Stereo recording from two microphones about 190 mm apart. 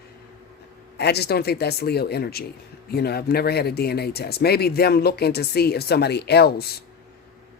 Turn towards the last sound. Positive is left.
turn(degrees=55)  # may be behind; listen again after turning